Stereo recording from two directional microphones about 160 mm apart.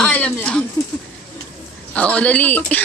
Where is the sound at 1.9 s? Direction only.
10° left (ahead or behind).